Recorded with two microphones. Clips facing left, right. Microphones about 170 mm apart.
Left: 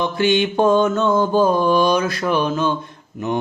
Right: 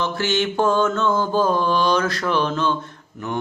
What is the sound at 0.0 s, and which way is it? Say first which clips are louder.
Mantra: left 4 dB; 15° left (ahead or behind).